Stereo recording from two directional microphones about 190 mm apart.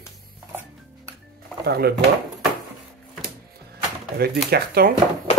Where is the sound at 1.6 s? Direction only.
55° right (ahead or behind).